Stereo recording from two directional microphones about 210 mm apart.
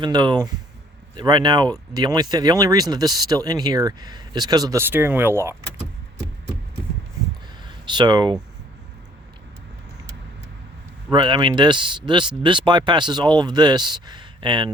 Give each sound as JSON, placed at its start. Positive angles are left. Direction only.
{"t": 0.0, "sound": "speech", "side_deg": -20}
{"t": 7.9, "sound": "speech", "side_deg": -20}
{"t": 11.1, "sound": "speech", "side_deg": -20}